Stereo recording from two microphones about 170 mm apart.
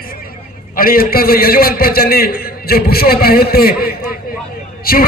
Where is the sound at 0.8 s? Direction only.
60° left (ahead or behind).